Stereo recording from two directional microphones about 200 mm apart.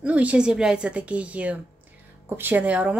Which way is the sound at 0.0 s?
5° right (ahead or behind).